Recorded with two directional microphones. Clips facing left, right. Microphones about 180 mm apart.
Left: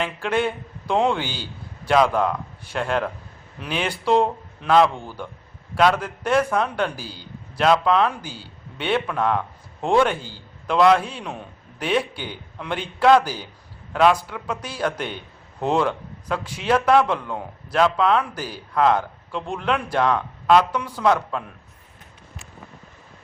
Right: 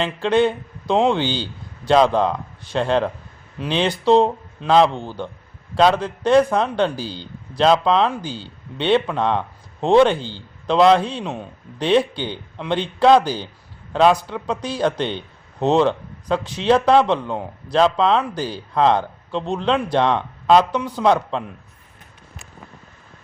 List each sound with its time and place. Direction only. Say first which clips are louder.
0.0 s a man's voice: right 5 dB; 25° right (ahead or behind)